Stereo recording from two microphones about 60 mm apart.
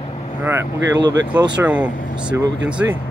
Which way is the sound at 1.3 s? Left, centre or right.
Right.